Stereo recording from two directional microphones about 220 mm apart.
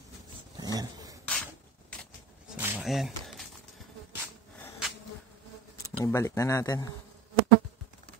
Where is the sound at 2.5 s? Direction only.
5° right (ahead or behind).